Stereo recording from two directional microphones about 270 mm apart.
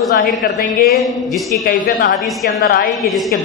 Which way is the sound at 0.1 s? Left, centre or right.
Left.